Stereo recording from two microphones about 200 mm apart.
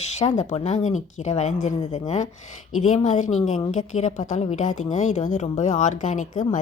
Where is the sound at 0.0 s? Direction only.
35° left (ahead or behind).